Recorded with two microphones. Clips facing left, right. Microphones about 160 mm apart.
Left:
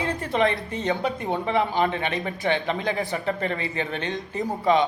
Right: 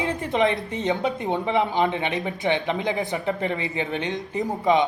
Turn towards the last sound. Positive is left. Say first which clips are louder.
# right 1 dB
turn(degrees=-20)  # may be behind; listen again after turning